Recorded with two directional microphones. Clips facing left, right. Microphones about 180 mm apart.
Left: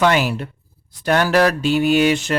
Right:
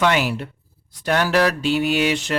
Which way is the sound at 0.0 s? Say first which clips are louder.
Left 2 dB; 45° left (ahead or behind).